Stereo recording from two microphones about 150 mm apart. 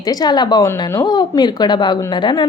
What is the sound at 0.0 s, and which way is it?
A woman's voice, 25° left (ahead or behind).